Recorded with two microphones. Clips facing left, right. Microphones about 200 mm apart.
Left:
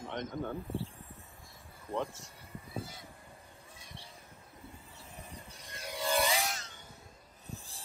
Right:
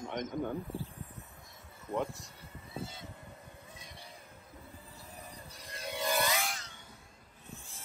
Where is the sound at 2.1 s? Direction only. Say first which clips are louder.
Left 1 dB; 30° right (ahead or behind).